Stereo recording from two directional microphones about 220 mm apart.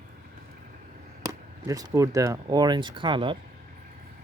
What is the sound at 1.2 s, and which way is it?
Speech, 15° right (ahead or behind).